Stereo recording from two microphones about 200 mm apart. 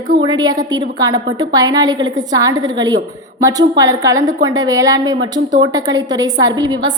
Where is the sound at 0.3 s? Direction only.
20° right (ahead or behind).